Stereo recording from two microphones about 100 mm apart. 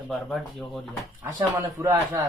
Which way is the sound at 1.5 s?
30° right (ahead or behind).